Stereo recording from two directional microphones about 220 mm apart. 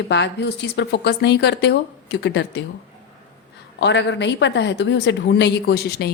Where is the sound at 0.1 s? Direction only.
50° left (ahead or behind).